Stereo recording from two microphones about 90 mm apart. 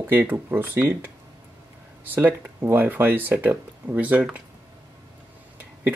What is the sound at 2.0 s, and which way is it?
Speech, 20° right (ahead or behind).